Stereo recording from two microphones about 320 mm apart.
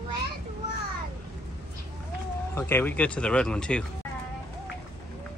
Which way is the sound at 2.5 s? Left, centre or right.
Centre.